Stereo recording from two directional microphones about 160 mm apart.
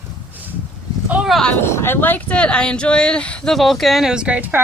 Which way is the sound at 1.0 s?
5° right (ahead or behind).